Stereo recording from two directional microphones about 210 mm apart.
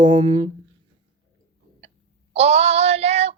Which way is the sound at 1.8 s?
25° right (ahead or behind).